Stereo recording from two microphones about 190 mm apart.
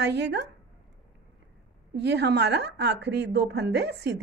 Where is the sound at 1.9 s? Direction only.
65° right (ahead or behind).